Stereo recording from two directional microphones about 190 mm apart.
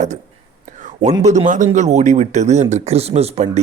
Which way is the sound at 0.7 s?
40° right (ahead or behind).